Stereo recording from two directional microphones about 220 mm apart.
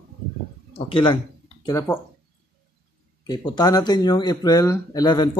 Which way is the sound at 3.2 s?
20° left (ahead or behind).